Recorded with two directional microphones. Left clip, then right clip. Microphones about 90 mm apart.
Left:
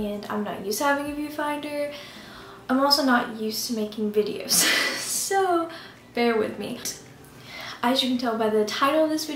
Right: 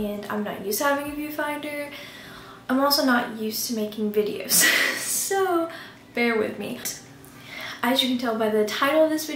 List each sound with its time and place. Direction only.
0.0 s a woman's voice: 5° left (ahead or behind)